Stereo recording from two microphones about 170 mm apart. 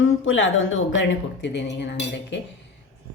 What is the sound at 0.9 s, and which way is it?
Speech, 90° left.